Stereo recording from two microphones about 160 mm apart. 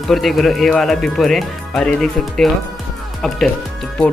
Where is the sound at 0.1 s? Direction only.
Centre (ahead or behind).